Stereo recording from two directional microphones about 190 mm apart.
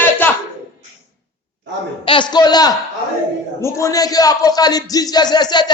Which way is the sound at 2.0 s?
25° left (ahead or behind).